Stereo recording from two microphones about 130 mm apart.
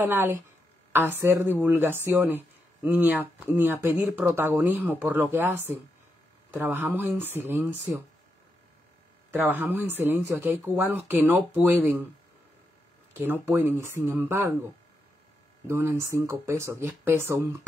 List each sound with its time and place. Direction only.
0.0 s a woman's voice: 15° right (ahead or behind)
9.3 s a woman's voice: 15° right (ahead or behind)
13.1 s speech: 15° right (ahead or behind)